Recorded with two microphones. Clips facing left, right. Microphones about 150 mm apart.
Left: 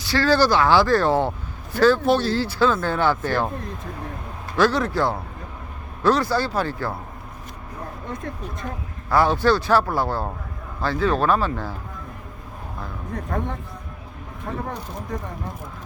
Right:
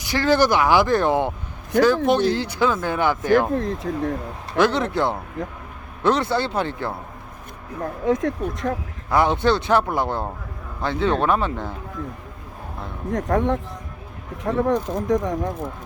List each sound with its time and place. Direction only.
0.0 s speech: 20° right (ahead or behind)
3.6 s speech: 90° right
4.5 s speech: 20° right (ahead or behind)
8.0 s speech: 90° right
9.0 s speech: 20° right (ahead or behind)
13.1 s speech: 90° right